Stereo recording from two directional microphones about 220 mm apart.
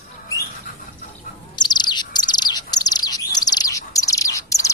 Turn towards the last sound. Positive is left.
turn(degrees=15)  # may be behind; listen again after turning